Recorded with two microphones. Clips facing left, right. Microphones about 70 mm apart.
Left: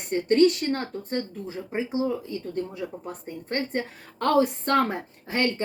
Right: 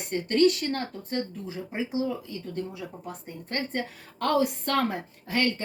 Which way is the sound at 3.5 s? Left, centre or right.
Left.